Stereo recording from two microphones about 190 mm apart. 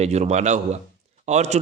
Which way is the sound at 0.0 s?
35° right (ahead or behind).